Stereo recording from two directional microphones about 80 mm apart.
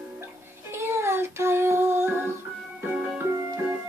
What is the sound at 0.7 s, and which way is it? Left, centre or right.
Child singing, right.